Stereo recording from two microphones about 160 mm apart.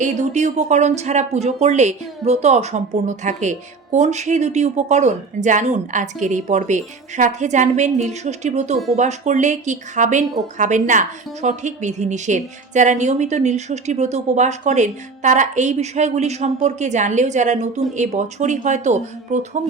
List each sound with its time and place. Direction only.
0.0 s speech: 50° right (ahead or behind)